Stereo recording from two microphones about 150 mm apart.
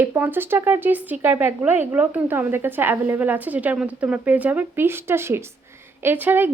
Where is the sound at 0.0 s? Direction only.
15° right (ahead or behind).